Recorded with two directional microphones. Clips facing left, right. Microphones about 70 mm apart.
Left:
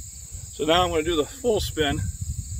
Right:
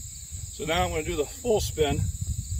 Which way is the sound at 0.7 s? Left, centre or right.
Left.